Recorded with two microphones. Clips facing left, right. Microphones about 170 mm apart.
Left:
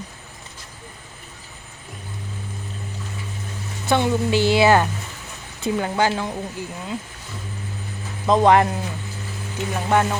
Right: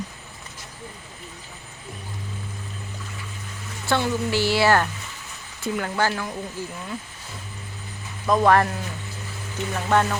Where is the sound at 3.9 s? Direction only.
20° left (ahead or behind).